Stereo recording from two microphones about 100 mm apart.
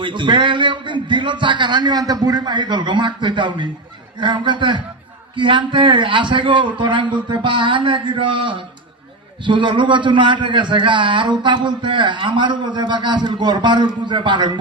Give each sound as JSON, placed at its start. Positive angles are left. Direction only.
{"t": 0.0, "sound": "a man's voice", "side_deg": -55}